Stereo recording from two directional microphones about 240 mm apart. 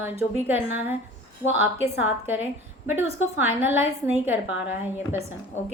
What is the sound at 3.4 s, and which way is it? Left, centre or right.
Speech, centre.